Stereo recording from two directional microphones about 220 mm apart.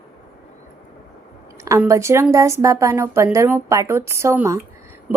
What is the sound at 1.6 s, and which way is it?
Speech, 15° right (ahead or behind).